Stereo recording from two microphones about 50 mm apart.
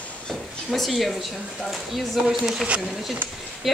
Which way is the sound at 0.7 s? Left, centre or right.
Centre.